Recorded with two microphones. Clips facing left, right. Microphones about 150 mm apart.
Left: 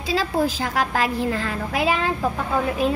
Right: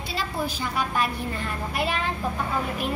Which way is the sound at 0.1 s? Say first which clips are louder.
Left 8 dB; 90° left.